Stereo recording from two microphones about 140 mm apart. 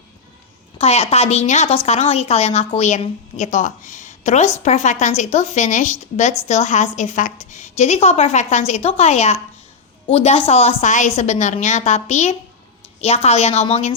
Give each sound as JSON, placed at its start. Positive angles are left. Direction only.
{"t": 0.8, "sound": "a woman's voice", "side_deg": 45}